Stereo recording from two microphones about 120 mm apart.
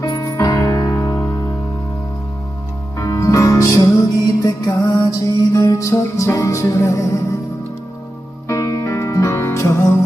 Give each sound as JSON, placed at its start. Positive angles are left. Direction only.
{"t": 0.0, "sound": "music", "side_deg": 30}
{"t": 3.0, "sound": "music", "side_deg": 25}
{"t": 8.4, "sound": "music", "side_deg": 25}